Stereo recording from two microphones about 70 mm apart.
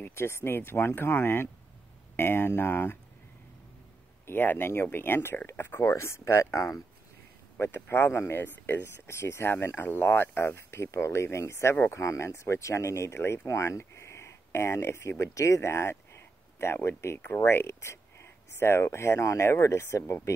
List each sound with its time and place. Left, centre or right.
0.0 s speech: left
4.3 s speech: left
7.6 s speech: left